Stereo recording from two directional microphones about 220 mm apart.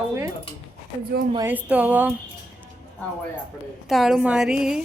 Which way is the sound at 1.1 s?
45° right (ahead or behind).